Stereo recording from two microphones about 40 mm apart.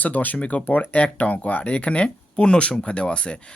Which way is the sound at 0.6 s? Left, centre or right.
Left.